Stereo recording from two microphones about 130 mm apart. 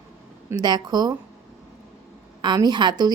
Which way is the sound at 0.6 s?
30° right (ahead or behind).